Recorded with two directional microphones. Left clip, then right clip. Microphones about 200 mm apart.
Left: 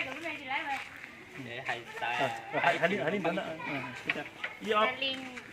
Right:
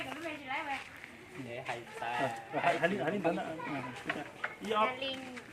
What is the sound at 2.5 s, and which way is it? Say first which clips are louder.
Speech: left 3 dB; 20° left (ahead or behind).